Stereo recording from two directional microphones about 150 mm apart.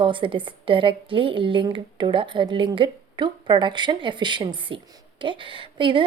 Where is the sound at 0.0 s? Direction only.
35° right (ahead or behind).